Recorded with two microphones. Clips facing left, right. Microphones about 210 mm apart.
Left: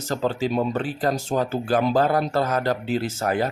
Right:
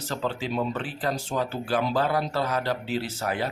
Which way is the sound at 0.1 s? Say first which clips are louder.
Left 6 dB; 40° left (ahead or behind).